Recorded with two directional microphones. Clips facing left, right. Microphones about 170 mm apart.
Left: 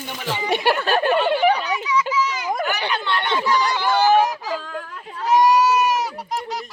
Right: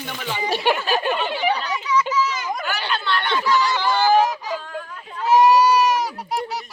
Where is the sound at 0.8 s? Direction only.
60° left (ahead or behind).